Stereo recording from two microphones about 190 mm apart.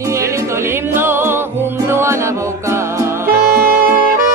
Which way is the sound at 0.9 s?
10° right (ahead or behind).